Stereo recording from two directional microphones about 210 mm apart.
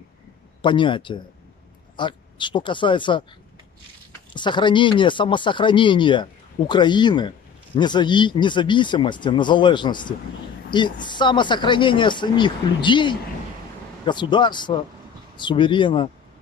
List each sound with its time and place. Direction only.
0.6 s speech: 25° left (ahead or behind)
4.3 s speech: 20° left (ahead or behind)